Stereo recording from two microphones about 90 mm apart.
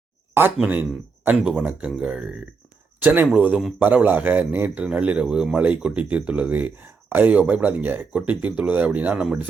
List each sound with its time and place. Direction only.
0.6 s speech: 20° right (ahead or behind)